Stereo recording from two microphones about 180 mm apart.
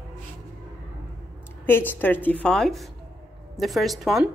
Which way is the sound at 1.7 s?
10° left (ahead or behind).